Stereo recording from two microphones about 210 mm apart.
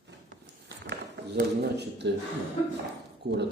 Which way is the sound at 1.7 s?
55° right (ahead or behind).